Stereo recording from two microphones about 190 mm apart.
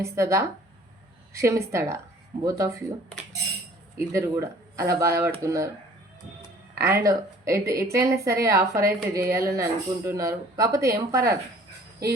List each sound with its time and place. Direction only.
0.0 s a woman's voice: 15° right (ahead or behind)
4.1 s a woman's voice: 15° right (ahead or behind)
6.7 s a woman's voice: 15° right (ahead or behind)